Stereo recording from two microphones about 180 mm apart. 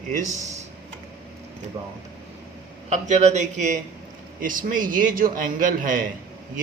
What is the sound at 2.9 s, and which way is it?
Speech, 40° right (ahead or behind).